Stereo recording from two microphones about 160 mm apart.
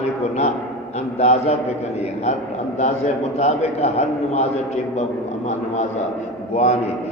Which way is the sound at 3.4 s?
45° left (ahead or behind).